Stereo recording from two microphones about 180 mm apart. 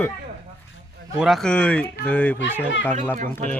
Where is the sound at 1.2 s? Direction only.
Centre (ahead or behind).